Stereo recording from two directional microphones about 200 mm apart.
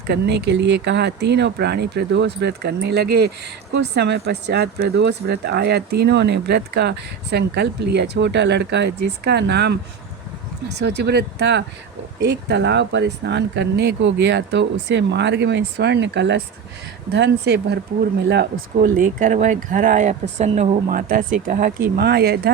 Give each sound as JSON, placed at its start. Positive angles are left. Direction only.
{"t": 0.1, "sound": "speech", "side_deg": -55}
{"t": 18.8, "sound": "speech", "side_deg": -45}